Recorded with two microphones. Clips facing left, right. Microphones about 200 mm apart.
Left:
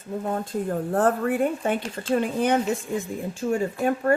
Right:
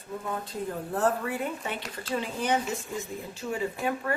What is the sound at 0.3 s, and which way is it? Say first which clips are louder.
Speech: left 7 dB; 45° left (ahead or behind).